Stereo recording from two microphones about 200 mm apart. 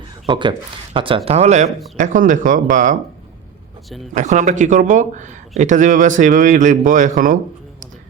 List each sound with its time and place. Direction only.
0.3 s speech: 25° right (ahead or behind); by 2.9 s 40° right (ahead or behind)
4.1 s speech: 40° right (ahead or behind)